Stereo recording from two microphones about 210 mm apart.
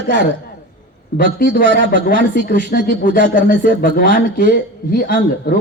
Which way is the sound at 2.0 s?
45° left (ahead or behind).